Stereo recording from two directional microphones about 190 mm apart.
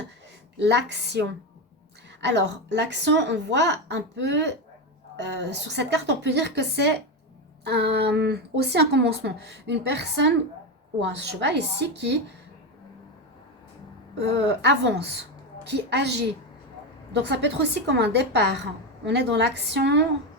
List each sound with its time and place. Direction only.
0.6 s speech: 65° right (ahead or behind)
14.2 s speech: 65° right (ahead or behind)
17.2 s speech: 65° right (ahead or behind)